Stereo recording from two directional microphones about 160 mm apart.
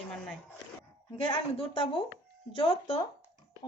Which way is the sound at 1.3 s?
30° left (ahead or behind).